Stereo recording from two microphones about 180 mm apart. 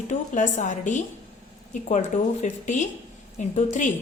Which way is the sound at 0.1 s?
45° left (ahead or behind).